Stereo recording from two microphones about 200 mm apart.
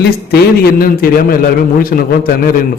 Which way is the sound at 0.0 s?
55° left (ahead or behind).